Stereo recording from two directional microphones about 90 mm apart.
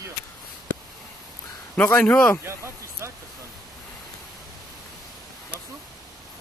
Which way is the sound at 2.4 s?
30° right (ahead or behind).